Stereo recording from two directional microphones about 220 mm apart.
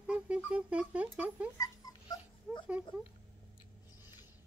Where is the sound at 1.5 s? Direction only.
20° left (ahead or behind).